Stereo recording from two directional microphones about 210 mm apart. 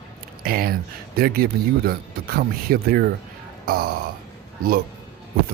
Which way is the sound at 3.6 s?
45° right (ahead or behind).